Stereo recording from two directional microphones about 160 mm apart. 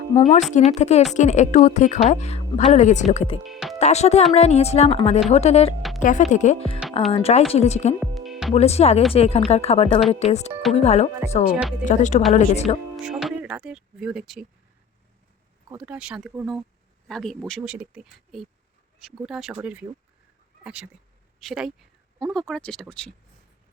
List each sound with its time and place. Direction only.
0.1 s a woman's voice: 30° left (ahead or behind)
0.5 s a woman's voice: 45° left (ahead or behind)
3.4 s speech: centre (ahead or behind)
3.8 s a woman's voice: 45° left (ahead or behind)
6.0 s a woman's voice: 50° left (ahead or behind)
7.9 s music: centre (ahead or behind)
8.5 s a woman's voice: 40° left (ahead or behind)
13.1 s speech: 5° right (ahead or behind)
15.8 s speech: 5° right (ahead or behind)
17.6 s speech: 10° right (ahead or behind)
20.7 s speech: 5° right (ahead or behind)